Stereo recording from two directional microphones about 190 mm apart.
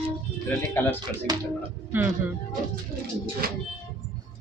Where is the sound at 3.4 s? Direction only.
50° right (ahead or behind).